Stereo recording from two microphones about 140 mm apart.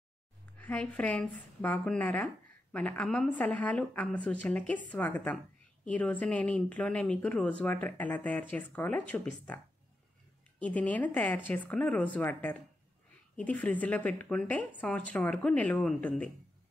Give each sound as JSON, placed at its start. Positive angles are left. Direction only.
{"t": 0.6, "sound": "a woman's voice", "side_deg": 10}
{"t": 10.6, "sound": "a woman's voice", "side_deg": 10}